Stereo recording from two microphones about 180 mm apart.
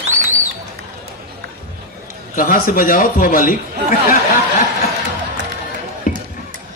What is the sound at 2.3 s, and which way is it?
A man's voice, 50° left (ahead or behind).